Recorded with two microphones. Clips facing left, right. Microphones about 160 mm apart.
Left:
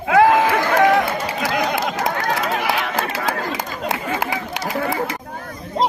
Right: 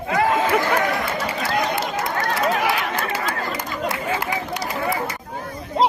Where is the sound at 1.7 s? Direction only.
90° left.